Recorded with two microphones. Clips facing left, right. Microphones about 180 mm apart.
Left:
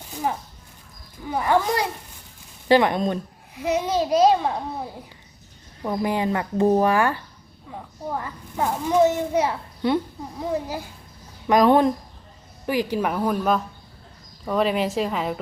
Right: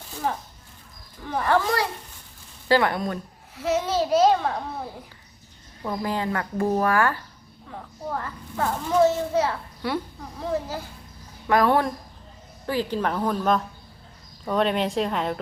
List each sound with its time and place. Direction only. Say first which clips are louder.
1.3 s a child's voice: left 1 dB; 10° left (ahead or behind)